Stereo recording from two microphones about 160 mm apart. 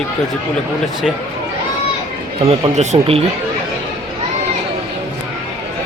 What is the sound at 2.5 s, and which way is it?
Speech, 40° right (ahead or behind).